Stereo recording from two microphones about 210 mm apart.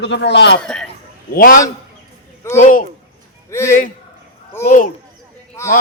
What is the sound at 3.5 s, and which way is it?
Speech, 10° left (ahead or behind).